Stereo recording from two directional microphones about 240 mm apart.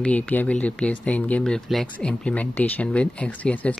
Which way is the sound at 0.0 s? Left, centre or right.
Centre.